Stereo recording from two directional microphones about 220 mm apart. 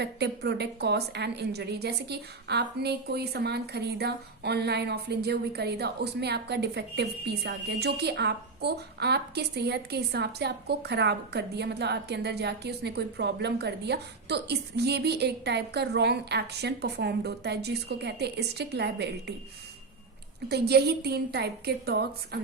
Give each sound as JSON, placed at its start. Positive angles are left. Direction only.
{"t": 0.0, "sound": "a woman's voice", "side_deg": -50}
{"t": 20.5, "sound": "a woman's voice", "side_deg": -45}